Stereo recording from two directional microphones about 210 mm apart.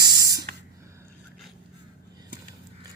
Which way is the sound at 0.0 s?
20° right (ahead or behind).